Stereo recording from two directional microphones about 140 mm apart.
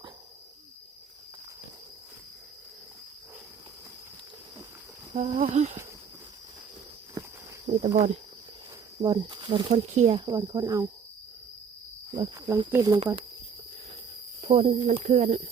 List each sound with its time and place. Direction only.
5.1 s speech: 50° right (ahead or behind)
7.9 s speech: 45° right (ahead or behind)
9.6 s speech: 50° right (ahead or behind)
10.2 s speech: 25° right (ahead or behind)
12.1 s speech: 25° right (ahead or behind)
14.4 s speech: 45° right (ahead or behind)